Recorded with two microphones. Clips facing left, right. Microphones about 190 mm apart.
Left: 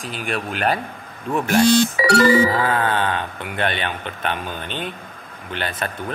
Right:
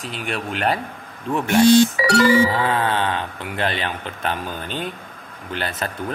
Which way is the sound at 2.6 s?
25° right (ahead or behind).